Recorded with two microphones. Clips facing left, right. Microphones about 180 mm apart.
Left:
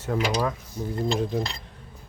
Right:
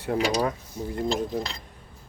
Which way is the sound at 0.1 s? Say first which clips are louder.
Right 1 dB; 45° right (ahead or behind).